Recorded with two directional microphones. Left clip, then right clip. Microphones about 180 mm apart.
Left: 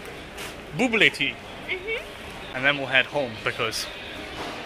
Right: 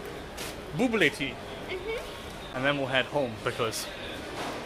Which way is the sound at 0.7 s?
25° left (ahead or behind).